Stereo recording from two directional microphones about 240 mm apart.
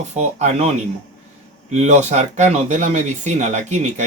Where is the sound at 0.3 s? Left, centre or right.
Right.